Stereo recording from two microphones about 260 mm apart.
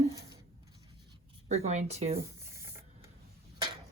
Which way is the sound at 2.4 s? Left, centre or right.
Centre.